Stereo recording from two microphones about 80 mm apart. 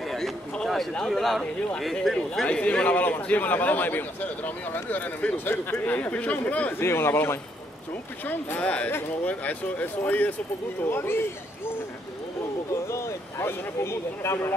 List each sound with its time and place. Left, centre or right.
0.0 s a sound: centre
0.9 s speech: centre
2.4 s a man's voice: centre
6.8 s a man's voice: left
12.8 s speech: left